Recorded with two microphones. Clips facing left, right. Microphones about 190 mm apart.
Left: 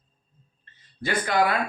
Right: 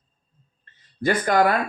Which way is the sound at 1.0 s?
45° right (ahead or behind).